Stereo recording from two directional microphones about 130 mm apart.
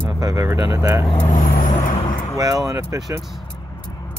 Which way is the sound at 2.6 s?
25° right (ahead or behind).